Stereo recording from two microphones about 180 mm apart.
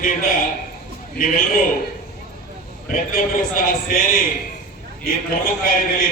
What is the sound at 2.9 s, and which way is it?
A man's voice, 50° left (ahead or behind).